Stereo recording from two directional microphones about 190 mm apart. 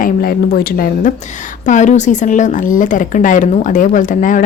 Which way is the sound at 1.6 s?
40° left (ahead or behind).